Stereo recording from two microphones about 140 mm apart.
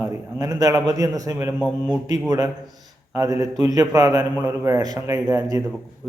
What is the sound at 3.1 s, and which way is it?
A man's voice, 25° right (ahead or behind).